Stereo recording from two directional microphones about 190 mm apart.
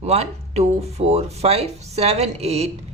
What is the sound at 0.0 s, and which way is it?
A woman's voice, 35° right (ahead or behind).